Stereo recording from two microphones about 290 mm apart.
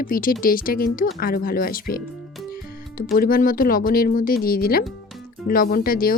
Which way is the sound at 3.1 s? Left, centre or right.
Left.